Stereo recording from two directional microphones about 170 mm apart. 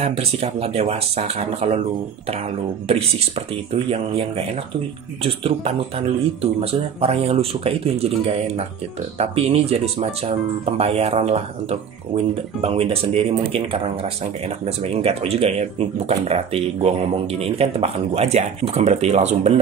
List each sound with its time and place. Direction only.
0.0 s speech: 35° right (ahead or behind)
2.9 s speech: 35° right (ahead or behind)